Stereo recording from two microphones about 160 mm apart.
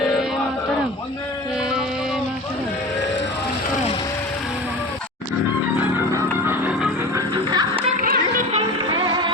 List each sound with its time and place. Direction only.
6.4 s music: 10° right (ahead or behind)
7.2 s music: 25° right (ahead or behind)
8.0 s music: 65° right (ahead or behind)